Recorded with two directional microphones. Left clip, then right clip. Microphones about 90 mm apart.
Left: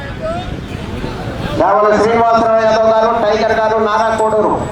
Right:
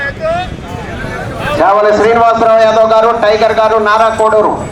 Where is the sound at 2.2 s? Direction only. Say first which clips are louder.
Right 4 dB; 5° right (ahead or behind).